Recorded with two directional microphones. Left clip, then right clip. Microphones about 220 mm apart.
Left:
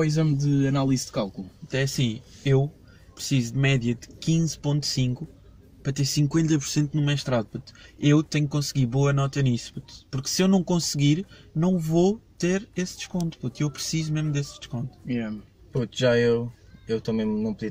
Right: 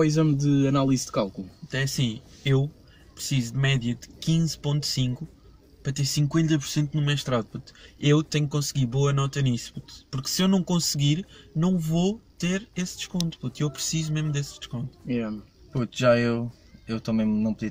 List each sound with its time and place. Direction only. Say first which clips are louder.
0.0 s speech: right 3 dB; centre (ahead or behind)
1.7 s speech: left 2 dB; 10° left (ahead or behind)
15.0 s speech: right 2 dB; centre (ahead or behind)
16.1 s speech: even; 15° right (ahead or behind)